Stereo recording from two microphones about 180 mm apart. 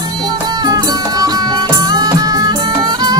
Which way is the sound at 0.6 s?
20° right (ahead or behind).